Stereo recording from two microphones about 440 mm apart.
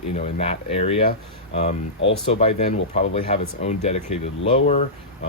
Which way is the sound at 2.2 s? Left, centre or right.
Centre.